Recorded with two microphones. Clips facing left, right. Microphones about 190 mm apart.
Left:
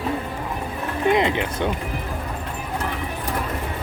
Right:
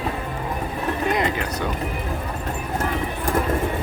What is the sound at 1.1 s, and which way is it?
Music, 20° left (ahead or behind).